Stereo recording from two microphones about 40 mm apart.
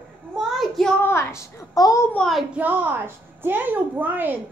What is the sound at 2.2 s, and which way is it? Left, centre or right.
Child singing, left.